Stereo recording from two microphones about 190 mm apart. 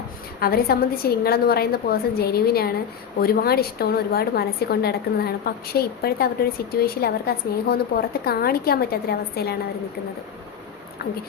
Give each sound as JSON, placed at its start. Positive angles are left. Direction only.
{"t": 0.3, "sound": "a woman's voice", "side_deg": 55}